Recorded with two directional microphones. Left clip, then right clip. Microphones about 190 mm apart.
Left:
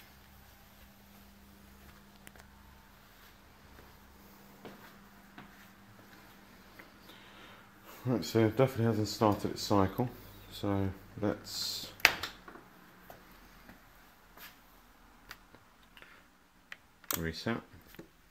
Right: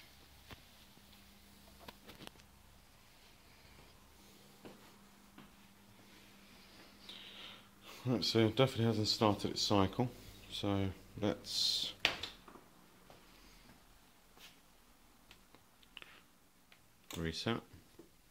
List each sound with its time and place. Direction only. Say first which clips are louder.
8.0 s speech: left 3 dB; 5° right (ahead or behind)
17.2 s speech: left 1 dB; 15° right (ahead or behind)